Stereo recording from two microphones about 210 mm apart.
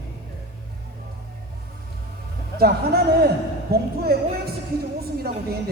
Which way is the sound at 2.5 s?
45° right (ahead or behind).